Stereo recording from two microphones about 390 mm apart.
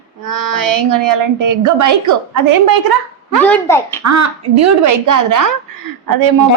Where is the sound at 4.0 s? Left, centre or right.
Right.